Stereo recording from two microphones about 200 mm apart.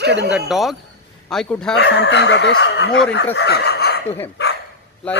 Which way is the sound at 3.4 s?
55° left (ahead or behind).